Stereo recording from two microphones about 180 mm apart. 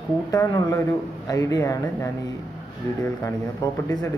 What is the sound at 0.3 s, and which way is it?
Speech, 20° left (ahead or behind).